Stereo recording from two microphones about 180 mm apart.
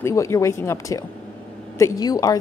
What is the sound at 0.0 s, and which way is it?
A woman's voice, 15° left (ahead or behind).